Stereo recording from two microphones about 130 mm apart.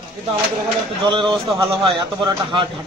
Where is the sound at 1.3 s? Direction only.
45° right (ahead or behind).